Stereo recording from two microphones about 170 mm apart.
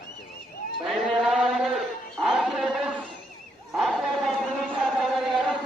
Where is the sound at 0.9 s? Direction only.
Centre (ahead or behind).